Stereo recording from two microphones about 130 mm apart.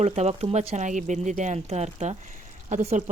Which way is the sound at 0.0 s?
55° right (ahead or behind).